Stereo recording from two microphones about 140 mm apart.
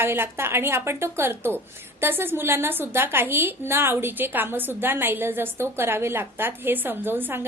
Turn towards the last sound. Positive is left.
turn(degrees=-15)  # may be behind; listen again after turning